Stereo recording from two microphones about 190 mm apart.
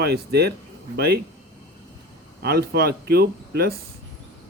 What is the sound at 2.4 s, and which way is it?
A man's voice, 55° right (ahead or behind).